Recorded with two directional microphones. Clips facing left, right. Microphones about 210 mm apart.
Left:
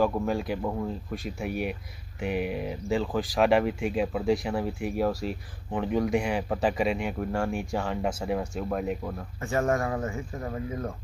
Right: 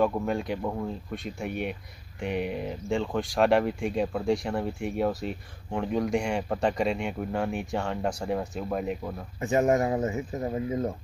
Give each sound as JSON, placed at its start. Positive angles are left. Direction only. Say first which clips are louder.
{"t": 0.0, "sound": "speech", "louder": "even", "side_deg": 0}
{"t": 9.4, "sound": "speech", "louder": "right 3 dB", "side_deg": -20}